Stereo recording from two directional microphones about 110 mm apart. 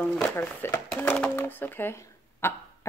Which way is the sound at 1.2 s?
20° left (ahead or behind).